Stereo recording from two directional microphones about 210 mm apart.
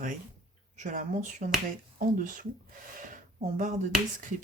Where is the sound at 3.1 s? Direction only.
35° right (ahead or behind).